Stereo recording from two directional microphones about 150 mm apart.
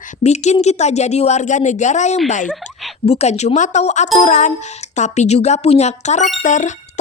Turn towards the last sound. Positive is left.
turn(degrees=55)  # may be behind; listen again after turning